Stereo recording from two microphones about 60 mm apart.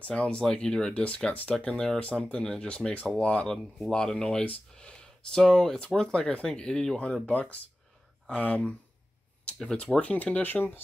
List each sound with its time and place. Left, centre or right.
0.0 s speech: centre
3.5 s speech: centre
7.2 s speech: left
9.9 s speech: left